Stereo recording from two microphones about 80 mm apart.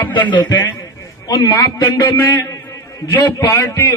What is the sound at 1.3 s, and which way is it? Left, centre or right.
Speech, left.